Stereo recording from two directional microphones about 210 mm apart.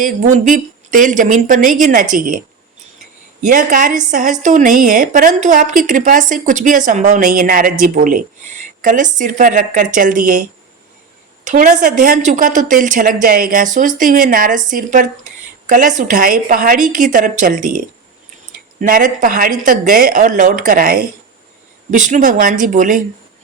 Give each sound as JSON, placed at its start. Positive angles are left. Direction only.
{"t": 0.3, "sound": "a woman's voice", "side_deg": -40}
{"t": 3.4, "sound": "a woman's voice", "side_deg": -40}
{"t": 11.4, "sound": "a woman's voice", "side_deg": -40}